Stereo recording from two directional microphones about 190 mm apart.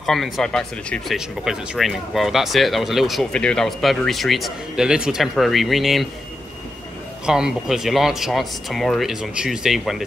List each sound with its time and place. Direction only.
0.0 s speech: centre (ahead or behind)
7.2 s speech: 5° right (ahead or behind)